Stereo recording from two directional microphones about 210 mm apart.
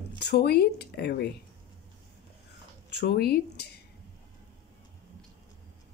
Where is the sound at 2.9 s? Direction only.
50° left (ahead or behind).